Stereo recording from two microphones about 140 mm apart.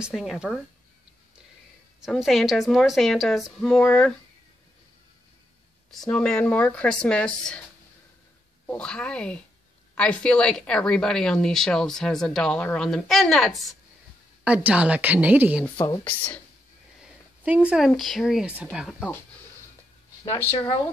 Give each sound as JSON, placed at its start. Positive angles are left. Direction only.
{"t": 0.0, "sound": "speech", "side_deg": -5}
{"t": 2.0, "sound": "speech", "side_deg": 0}
{"t": 5.9, "sound": "speech", "side_deg": 5}
{"t": 8.6, "sound": "speech", "side_deg": 5}
{"t": 14.4, "sound": "a woman's voice", "side_deg": -10}
{"t": 17.0, "sound": "speech", "side_deg": -10}
{"t": 20.2, "sound": "speech", "side_deg": 15}